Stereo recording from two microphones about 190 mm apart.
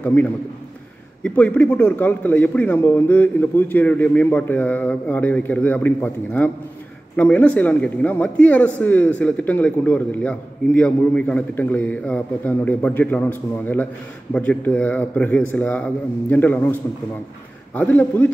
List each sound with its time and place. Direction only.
0.0 s a man's voice: 10° left (ahead or behind)
17.7 s speech: 10° left (ahead or behind)